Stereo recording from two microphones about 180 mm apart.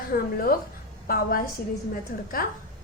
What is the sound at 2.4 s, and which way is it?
Speech, 55° left (ahead or behind).